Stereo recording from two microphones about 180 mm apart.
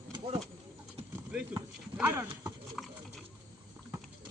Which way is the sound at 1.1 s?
5° right (ahead or behind).